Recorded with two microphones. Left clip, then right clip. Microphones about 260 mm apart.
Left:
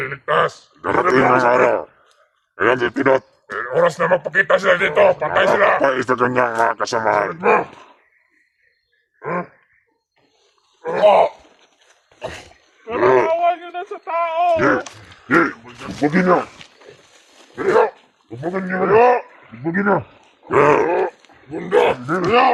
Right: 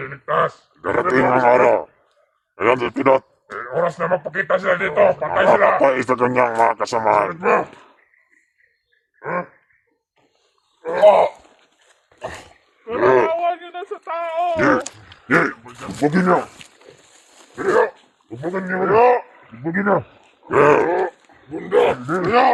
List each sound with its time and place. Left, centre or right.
0.0 s grunt: left
0.8 s speech: centre
3.4 s speech: left
5.8 s speech: centre
7.3 s speech: centre
7.7 s a sound: centre
9.2 s a sound: centre
11.0 s speech: centre
12.2 s a sound: centre
14.6 s speech: right
16.0 s speech: right
17.6 s speech: centre
21.5 s speech: left
22.3 s speech: centre